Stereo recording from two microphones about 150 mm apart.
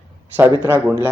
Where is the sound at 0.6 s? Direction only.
10° right (ahead or behind).